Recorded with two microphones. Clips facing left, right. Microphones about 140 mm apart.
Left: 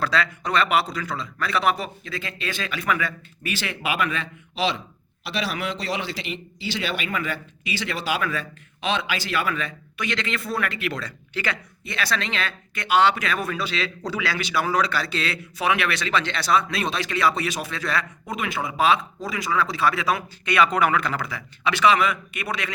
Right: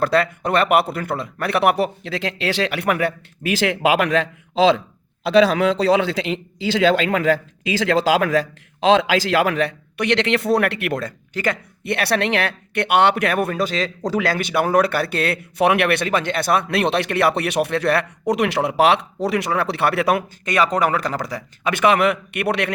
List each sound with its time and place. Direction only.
0.0 s speech: 55° right (ahead or behind); by 4.3 s 90° right
6.3 s a man's voice: 90° right; by 11.6 s 45° right (ahead or behind)
11.8 s speech: 65° right (ahead or behind)
20.4 s a man's voice: 40° right (ahead or behind); by 22.7 s 65° right (ahead or behind)